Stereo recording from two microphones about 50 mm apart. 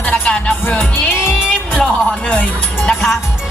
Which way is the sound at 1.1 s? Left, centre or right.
Left.